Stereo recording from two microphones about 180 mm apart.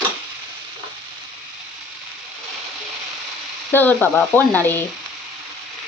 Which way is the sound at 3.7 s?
10° left (ahead or behind).